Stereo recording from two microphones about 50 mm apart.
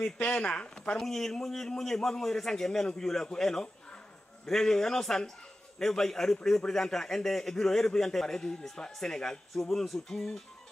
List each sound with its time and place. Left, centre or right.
0.0 s speech: left
0.7 s a man's voice: centre